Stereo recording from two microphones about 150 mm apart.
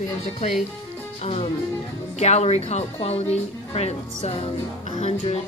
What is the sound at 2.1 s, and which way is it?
Speech, 45° left (ahead or behind).